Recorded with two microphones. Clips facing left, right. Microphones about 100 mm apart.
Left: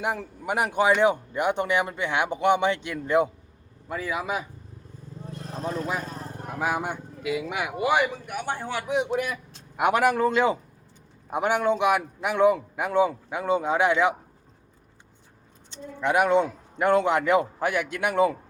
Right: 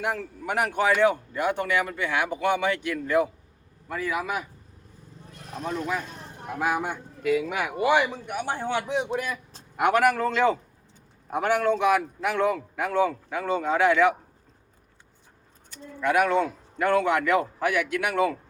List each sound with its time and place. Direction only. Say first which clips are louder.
0.0 s speech: even; 15° left (ahead or behind)
5.3 s vehicle: left 1 dB; 35° left (ahead or behind)
6.6 s a man's voice: right 1 dB; 15° left (ahead or behind)
8.3 s a man's voice: right 2 dB; 20° right (ahead or behind)
9.7 s a man's voice: even; 10° left (ahead or behind)
15.7 s speech: even; 20° left (ahead or behind)